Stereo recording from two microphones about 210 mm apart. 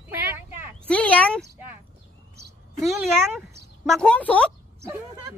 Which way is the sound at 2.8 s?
Centre (ahead or behind).